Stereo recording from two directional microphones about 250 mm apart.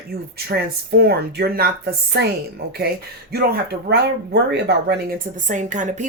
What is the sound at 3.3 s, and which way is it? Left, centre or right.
Speech, right.